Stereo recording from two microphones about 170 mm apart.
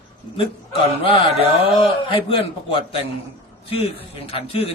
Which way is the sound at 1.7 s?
30° left (ahead or behind).